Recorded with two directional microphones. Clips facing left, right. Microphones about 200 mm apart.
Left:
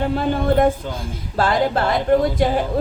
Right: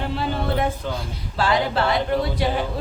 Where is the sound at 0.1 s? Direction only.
50° left (ahead or behind).